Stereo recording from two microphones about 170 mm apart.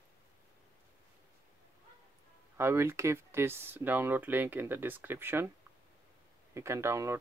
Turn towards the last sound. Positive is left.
turn(degrees=-15)  # may be behind; listen again after turning